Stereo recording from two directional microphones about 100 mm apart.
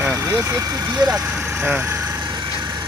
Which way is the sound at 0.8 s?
15° right (ahead or behind).